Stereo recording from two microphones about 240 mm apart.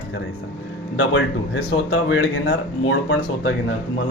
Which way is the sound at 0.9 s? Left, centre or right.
Left.